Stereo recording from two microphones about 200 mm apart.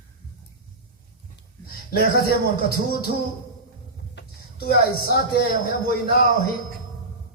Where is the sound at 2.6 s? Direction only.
50° left (ahead or behind).